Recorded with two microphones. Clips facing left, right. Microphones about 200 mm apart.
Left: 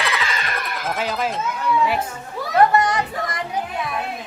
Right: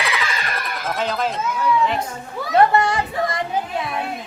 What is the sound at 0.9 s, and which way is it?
Speech, 5° left (ahead or behind).